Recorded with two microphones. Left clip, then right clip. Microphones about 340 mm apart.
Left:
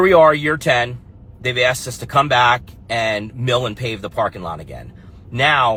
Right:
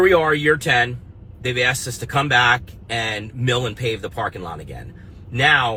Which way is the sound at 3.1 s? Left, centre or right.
Centre.